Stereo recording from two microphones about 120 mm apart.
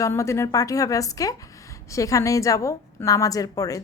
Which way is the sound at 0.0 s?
25° left (ahead or behind).